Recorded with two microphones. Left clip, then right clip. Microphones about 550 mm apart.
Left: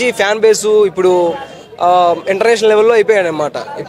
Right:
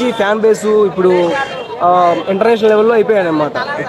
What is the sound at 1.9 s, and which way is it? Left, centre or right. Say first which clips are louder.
A man's voice: even; left.